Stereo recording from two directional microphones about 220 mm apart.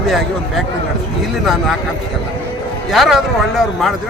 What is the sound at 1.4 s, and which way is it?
Speech, centre (ahead or behind).